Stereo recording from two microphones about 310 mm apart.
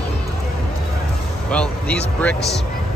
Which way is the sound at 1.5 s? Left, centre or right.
Centre.